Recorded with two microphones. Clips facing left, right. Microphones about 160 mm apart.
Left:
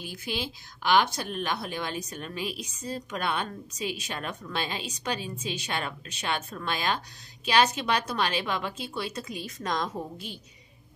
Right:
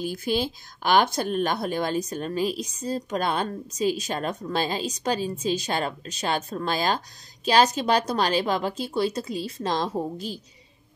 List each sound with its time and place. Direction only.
0.0 s speech: 45° right (ahead or behind)